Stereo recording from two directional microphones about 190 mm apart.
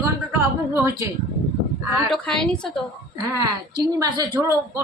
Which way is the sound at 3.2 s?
20° right (ahead or behind).